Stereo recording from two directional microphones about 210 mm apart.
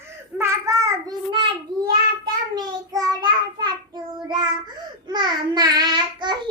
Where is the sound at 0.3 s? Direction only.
15° right (ahead or behind).